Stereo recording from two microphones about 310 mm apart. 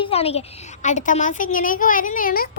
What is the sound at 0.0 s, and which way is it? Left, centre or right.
A child's voice, centre.